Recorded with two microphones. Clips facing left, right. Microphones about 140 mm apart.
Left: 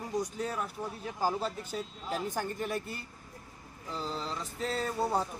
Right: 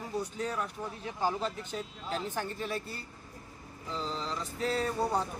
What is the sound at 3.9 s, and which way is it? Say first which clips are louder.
Mantra: right 1 dB; 5° left (ahead or behind).